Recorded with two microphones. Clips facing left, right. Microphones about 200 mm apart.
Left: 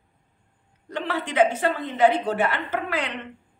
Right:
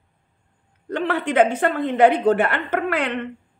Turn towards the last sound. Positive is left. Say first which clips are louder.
# right 5 dB
turn(degrees=-55)  # may be behind; listen again after turning